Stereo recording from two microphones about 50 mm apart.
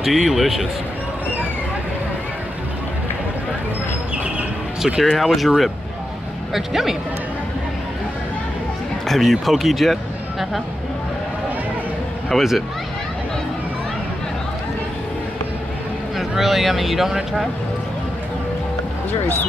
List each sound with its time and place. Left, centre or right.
0.0 s speech: centre
4.8 s speech: centre
6.5 s speech: centre
9.0 s speech: centre
12.3 s speech: centre
16.2 s speech: centre